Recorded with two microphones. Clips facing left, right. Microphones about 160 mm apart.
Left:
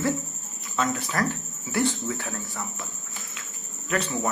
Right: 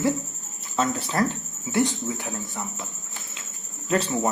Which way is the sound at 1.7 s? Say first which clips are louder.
Right 2 dB; 15° right (ahead or behind).